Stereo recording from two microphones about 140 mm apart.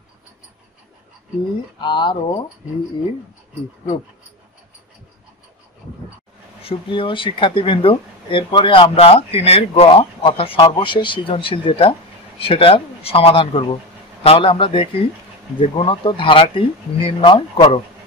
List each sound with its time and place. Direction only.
1.8 s speech: 35° left (ahead or behind)
6.6 s speech: 40° left (ahead or behind)